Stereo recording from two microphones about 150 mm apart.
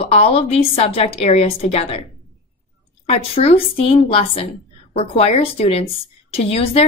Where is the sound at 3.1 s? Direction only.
40° left (ahead or behind).